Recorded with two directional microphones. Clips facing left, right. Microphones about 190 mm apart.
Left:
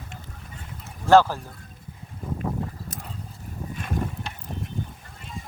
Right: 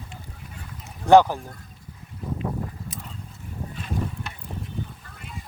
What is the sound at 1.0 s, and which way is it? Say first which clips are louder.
Speech: right 2 dB; 15° right (ahead or behind).